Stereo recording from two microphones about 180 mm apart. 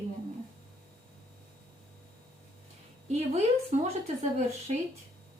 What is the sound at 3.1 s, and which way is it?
A woman's voice, 35° right (ahead or behind).